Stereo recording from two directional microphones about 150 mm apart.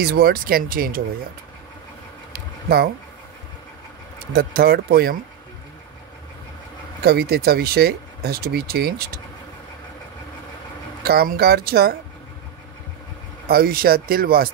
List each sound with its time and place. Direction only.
0.0 s speech: 85° right
2.3 s a sound: 90° right
4.3 s speech: 90° right
7.0 s speech: 90° right
11.1 s speech: 90° right
13.5 s speech: 85° right